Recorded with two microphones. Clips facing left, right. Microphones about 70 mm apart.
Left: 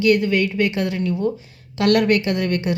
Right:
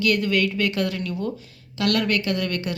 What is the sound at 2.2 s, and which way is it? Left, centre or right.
Speech, left.